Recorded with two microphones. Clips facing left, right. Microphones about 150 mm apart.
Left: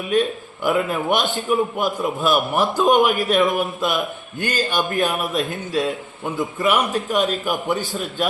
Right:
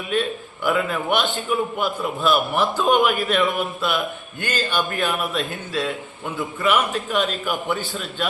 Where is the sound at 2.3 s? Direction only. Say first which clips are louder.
Left 1 dB; 10° left (ahead or behind).